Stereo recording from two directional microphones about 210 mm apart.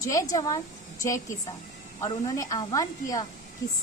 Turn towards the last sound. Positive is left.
turn(degrees=15)  # may be behind; listen again after turning